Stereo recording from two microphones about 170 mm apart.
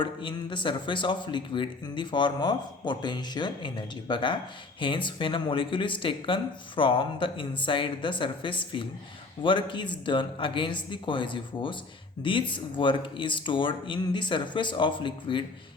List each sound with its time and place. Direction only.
0.0 s speech: 30° left (ahead or behind)